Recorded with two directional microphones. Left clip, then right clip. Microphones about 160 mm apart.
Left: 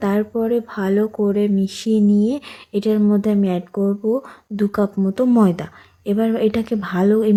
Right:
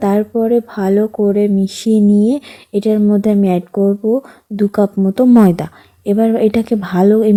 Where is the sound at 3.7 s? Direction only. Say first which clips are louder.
Right 5 dB; 20° right (ahead or behind).